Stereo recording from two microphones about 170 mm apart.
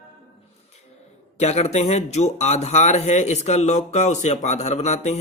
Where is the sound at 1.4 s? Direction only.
40° left (ahead or behind).